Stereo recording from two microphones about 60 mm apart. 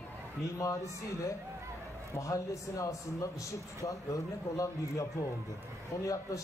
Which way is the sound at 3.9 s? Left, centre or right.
Left.